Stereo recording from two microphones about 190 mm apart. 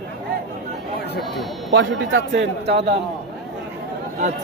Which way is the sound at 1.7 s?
75° right (ahead or behind).